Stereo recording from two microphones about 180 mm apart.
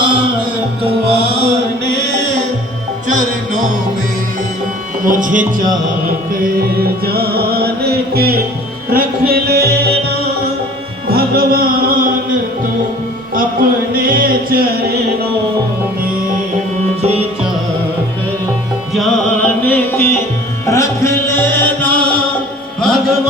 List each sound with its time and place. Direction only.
0.8 s music: 30° right (ahead or behind)
3.1 s music: 45° right (ahead or behind)
5.0 s speech: 45° right (ahead or behind)
6.4 s music: 55° right (ahead or behind)
13.3 s music: 55° right (ahead or behind)
17.0 s music: 35° right (ahead or behind)
18.9 s music: 5° left (ahead or behind)